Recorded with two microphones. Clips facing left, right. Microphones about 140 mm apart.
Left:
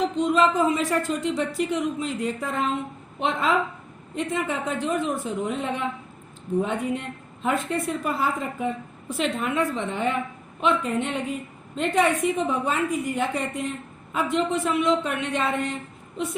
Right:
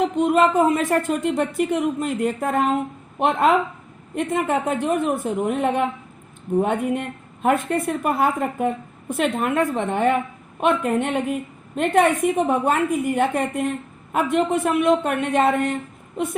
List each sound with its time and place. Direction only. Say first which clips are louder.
0.0 s a woman's voice: right 3 dB; 55° right (ahead or behind)